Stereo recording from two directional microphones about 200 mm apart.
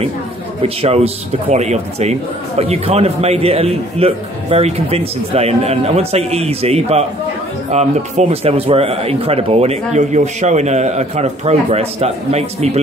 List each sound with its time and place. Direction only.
0.6 s speech: 30° right (ahead or behind)